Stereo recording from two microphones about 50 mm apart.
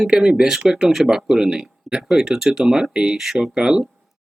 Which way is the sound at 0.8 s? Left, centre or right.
Centre.